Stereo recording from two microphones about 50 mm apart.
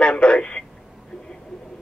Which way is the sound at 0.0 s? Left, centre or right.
Left.